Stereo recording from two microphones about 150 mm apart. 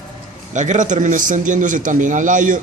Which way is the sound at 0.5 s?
55° right (ahead or behind).